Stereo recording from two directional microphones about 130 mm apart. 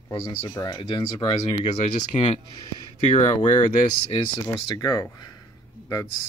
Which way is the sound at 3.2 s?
65° left (ahead or behind).